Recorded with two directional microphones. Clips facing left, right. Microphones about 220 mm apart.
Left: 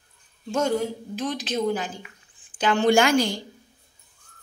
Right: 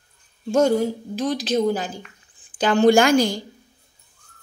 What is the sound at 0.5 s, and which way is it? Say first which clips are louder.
A woman's voice: right 6 dB; 35° right (ahead or behind).